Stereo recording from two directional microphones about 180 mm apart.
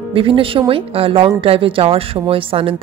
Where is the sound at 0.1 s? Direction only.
30° right (ahead or behind).